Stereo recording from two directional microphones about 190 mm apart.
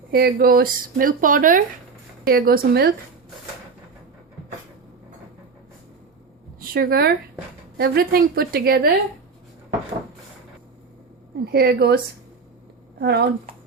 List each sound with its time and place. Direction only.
0.1 s speech: 55° right (ahead or behind)
6.6 s speech: 50° right (ahead or behind)
11.4 s speech: 55° right (ahead or behind)
13.0 s speech: 60° right (ahead or behind)